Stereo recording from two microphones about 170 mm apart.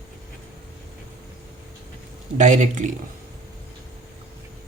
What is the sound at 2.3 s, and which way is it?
Speech, 45° right (ahead or behind).